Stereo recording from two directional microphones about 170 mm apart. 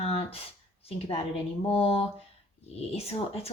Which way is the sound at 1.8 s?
35° left (ahead or behind).